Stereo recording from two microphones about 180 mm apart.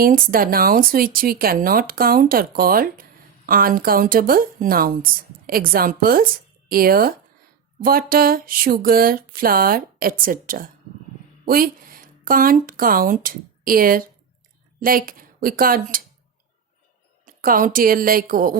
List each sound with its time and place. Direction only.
0.0 s speech: 50° right (ahead or behind)
17.2 s speech: 50° right (ahead or behind)